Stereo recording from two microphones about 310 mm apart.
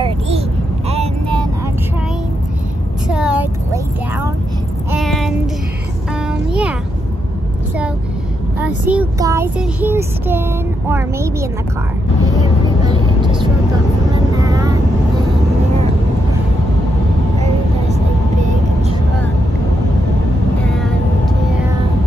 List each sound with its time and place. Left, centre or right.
0.8 s vehicle: centre
3.1 s vehicle: centre
4.9 s child singing: centre
8.6 s child singing: centre
10.9 s a child's voice: centre
12.3 s vehicle: centre
20.6 s vehicle: centre